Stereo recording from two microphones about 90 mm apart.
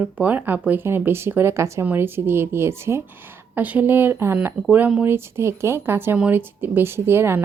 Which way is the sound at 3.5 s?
20° right (ahead or behind).